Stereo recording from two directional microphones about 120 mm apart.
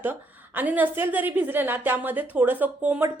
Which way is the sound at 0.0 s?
15° right (ahead or behind).